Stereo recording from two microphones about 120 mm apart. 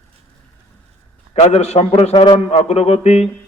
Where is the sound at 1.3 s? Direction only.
60° left (ahead or behind).